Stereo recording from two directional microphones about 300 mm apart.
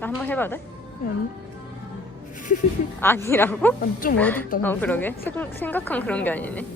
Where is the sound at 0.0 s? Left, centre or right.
Centre.